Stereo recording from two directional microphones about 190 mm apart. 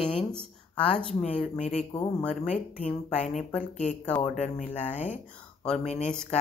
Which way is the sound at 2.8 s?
35° left (ahead or behind).